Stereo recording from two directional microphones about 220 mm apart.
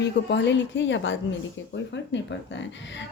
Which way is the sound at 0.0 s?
55° left (ahead or behind).